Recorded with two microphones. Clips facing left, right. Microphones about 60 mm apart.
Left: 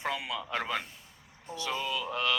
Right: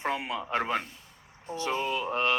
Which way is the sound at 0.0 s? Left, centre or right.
Right.